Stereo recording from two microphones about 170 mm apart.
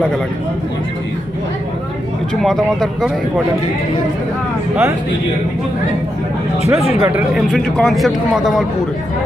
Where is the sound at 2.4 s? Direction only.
Centre (ahead or behind).